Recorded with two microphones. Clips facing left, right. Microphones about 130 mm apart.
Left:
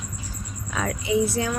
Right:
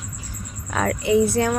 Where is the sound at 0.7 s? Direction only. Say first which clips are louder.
Right 5 dB; 60° right (ahead or behind).